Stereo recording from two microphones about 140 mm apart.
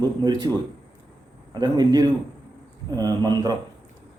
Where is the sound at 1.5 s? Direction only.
30° right (ahead or behind).